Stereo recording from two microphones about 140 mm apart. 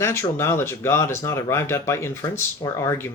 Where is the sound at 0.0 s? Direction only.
20° left (ahead or behind).